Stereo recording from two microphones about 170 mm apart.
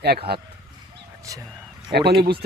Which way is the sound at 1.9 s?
70° right (ahead or behind).